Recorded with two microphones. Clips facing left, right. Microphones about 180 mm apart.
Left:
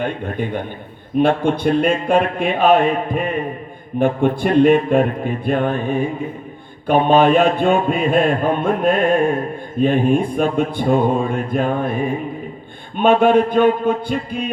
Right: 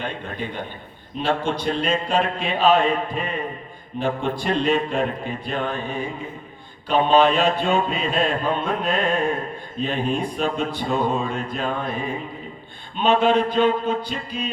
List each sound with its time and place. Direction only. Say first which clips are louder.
0.0 s a man's voice: left 7 dB; 50° left (ahead or behind)